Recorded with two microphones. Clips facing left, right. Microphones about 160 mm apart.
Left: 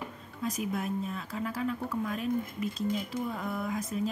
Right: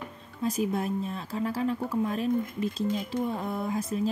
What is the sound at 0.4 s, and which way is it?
Speech, 30° right (ahead or behind).